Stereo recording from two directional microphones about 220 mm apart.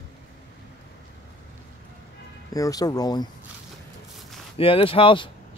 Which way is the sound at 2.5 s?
15° left (ahead or behind).